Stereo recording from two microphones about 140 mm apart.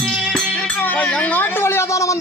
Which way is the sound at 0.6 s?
10° left (ahead or behind).